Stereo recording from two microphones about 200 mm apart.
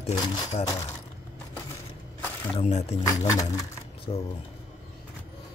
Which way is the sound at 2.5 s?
30° left (ahead or behind).